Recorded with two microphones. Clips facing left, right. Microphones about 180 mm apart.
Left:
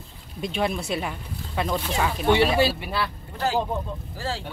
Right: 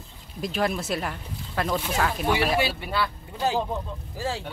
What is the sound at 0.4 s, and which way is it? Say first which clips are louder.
Speech: even; centre (ahead or behind).